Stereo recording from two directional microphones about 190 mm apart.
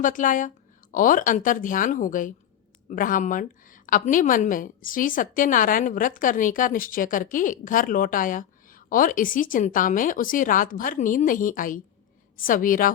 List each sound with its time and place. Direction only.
0.0 s a woman's voice: 45° left (ahead or behind)